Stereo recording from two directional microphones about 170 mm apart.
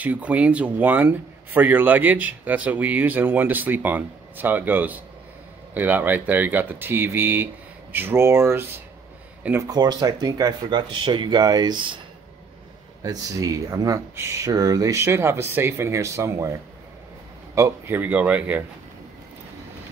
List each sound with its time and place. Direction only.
0.0 s speech: 10° right (ahead or behind)
9.7 s speech: 25° right (ahead or behind)
13.0 s speech: 20° right (ahead or behind)
17.6 s speech: 15° right (ahead or behind)